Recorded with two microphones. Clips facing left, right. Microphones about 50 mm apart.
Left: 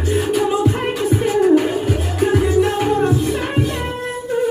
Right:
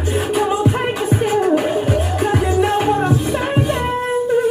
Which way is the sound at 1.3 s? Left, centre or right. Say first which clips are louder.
Left 3 dB; centre.